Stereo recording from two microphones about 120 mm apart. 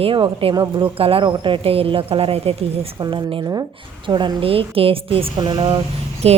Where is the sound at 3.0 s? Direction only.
40° right (ahead or behind).